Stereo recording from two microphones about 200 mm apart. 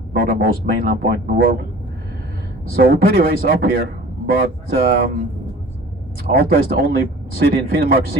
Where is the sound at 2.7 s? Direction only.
50° right (ahead or behind).